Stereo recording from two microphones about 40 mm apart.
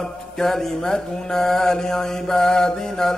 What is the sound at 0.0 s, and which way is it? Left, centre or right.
Mantra, centre.